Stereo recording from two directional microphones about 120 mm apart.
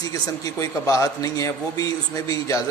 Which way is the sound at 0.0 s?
30° left (ahead or behind).